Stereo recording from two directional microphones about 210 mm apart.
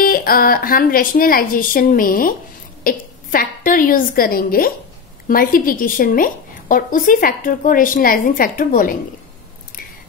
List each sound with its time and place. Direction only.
0.0 s a woman's voice: 45° left (ahead or behind)